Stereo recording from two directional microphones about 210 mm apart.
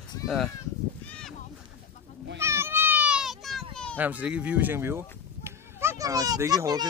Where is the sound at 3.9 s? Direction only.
5° right (ahead or behind).